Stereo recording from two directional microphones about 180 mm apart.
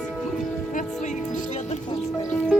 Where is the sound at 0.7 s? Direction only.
45° left (ahead or behind).